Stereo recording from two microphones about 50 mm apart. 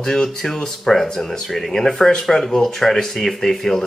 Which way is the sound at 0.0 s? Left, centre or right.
Centre.